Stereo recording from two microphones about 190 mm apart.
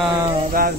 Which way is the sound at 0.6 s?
50° right (ahead or behind).